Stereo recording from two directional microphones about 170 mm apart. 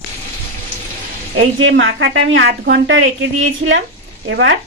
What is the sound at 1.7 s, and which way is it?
A woman's voice, 90° right.